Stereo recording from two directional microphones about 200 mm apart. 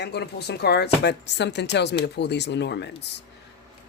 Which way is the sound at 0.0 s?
55° left (ahead or behind).